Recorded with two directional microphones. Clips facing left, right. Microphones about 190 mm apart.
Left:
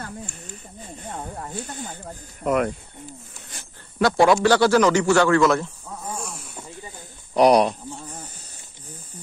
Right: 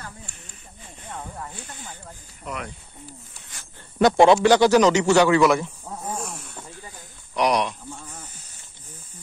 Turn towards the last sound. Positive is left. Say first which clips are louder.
# left 6 dB
turn(degrees=35)  # may be behind; listen again after turning